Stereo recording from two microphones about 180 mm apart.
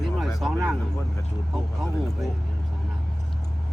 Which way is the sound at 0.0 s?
Centre (ahead or behind).